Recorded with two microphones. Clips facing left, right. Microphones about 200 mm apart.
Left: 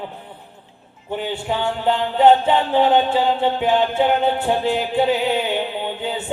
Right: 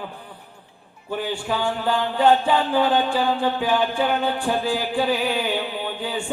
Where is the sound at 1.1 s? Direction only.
20° left (ahead or behind).